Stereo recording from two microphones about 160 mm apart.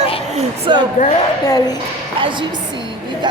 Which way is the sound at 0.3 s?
45° right (ahead or behind).